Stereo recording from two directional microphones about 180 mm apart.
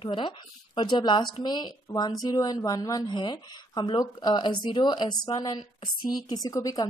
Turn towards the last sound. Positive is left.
turn(degrees=20)  # may be behind; listen again after turning